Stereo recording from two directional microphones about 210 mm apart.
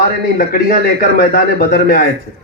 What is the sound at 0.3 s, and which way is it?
A man's voice, 45° left (ahead or behind).